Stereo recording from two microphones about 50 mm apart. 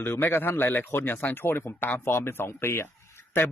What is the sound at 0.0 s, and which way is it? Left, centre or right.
A man's voice, left.